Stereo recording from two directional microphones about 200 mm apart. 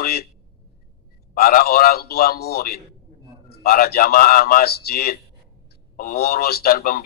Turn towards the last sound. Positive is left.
turn(degrees=45)  # may be behind; listen again after turning